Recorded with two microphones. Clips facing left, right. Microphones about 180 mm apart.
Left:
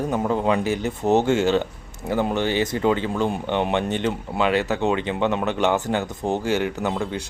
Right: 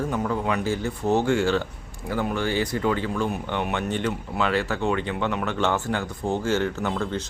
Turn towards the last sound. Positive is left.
turn(degrees=15)  # may be behind; listen again after turning